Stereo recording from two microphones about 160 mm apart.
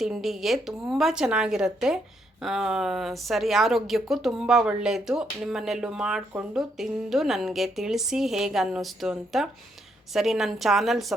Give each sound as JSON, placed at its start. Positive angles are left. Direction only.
{"t": 0.0, "sound": "a woman's voice", "side_deg": 0}